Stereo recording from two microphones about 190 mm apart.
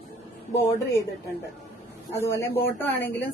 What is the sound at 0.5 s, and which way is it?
Speech, 15° left (ahead or behind).